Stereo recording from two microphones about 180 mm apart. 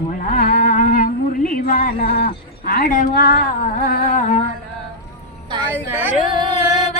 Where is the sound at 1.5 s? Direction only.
50° left (ahead or behind).